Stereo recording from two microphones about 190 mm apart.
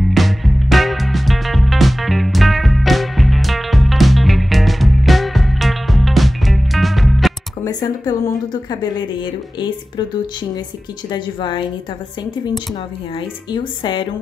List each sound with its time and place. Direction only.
0.0 s music: centre (ahead or behind)
7.6 s a sound: 20° left (ahead or behind)
8.6 s a woman's voice: 20° left (ahead or behind)
11.1 s a woman's voice: 25° left (ahead or behind)
13.5 s a woman's voice: 25° left (ahead or behind)